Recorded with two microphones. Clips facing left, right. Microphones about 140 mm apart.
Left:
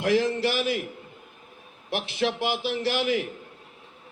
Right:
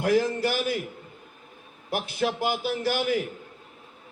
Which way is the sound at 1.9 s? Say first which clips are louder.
Even; 45° right (ahead or behind).